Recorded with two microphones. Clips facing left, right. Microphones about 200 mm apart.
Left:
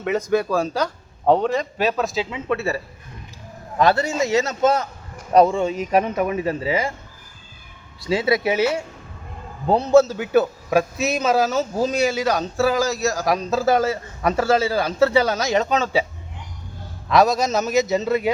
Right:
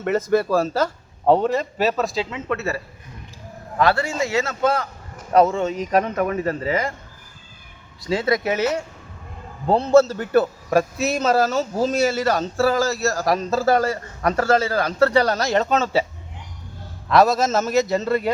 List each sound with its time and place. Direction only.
0.0 s a man's voice: centre (ahead or behind)
2.3 s speech: 15° left (ahead or behind)
8.0 s a man's voice: 10° left (ahead or behind)
17.1 s a man's voice: centre (ahead or behind)